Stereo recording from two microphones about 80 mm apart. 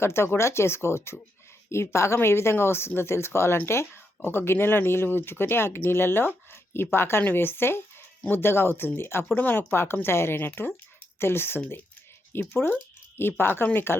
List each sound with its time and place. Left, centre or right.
0.0 s speech: left